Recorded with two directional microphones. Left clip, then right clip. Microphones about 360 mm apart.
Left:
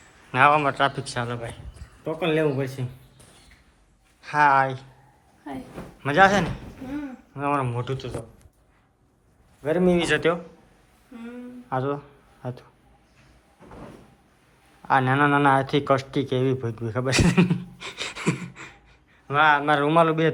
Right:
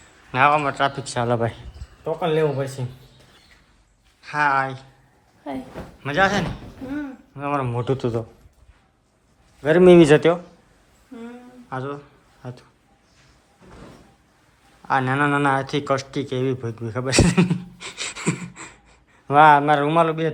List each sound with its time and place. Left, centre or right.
0.3 s a man's voice: centre
4.2 s speech: centre
6.0 s speech: centre
9.6 s speech: right
11.7 s a sound: centre
14.8 s a man's voice: centre